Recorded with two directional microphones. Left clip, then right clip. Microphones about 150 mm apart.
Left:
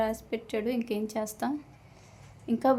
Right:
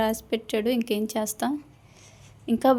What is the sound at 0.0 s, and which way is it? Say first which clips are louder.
A woman's voice: right 4 dB; 35° right (ahead or behind).